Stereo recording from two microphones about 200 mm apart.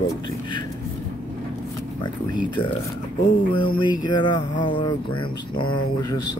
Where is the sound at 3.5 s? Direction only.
25° left (ahead or behind).